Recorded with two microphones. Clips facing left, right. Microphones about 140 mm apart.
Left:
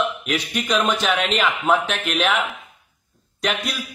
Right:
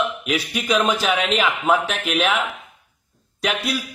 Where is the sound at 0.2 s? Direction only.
5° right (ahead or behind).